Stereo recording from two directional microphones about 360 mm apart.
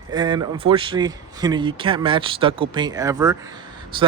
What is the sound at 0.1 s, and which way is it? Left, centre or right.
A man's voice, centre.